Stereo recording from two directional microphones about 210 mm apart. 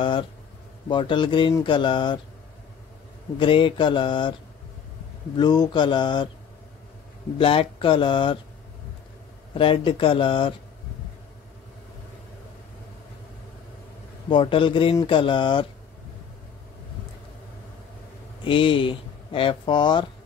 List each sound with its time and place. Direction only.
0.0 s speech: 25° left (ahead or behind)
3.3 s speech: 25° left (ahead or behind)
5.4 s speech: 20° left (ahead or behind)
7.3 s speech: 25° left (ahead or behind)
9.5 s speech: 25° left (ahead or behind)
14.3 s speech: 25° left (ahead or behind)
18.4 s speech: 25° left (ahead or behind)